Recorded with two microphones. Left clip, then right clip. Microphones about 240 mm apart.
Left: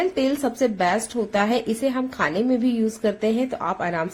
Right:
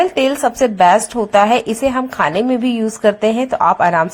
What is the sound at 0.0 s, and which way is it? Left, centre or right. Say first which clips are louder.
Speech: right 8 dB; right.